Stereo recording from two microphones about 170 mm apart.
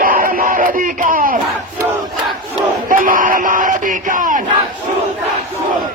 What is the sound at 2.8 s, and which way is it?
Speech, 55° right (ahead or behind).